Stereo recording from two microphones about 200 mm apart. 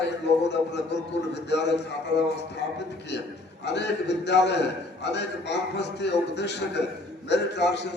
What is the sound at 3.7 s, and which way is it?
A man's voice, 60° left (ahead or behind).